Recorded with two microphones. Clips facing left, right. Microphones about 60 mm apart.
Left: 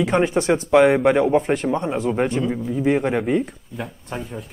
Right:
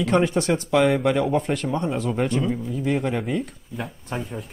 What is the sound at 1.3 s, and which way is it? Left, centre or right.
Speech, left.